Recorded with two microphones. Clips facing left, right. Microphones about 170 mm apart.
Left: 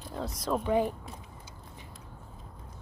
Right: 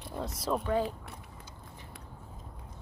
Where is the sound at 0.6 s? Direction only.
15° left (ahead or behind).